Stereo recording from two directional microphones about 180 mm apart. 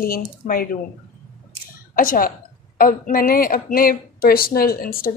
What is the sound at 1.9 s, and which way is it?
Speech, 50° left (ahead or behind).